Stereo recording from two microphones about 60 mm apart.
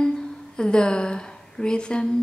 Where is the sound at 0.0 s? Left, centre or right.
Centre.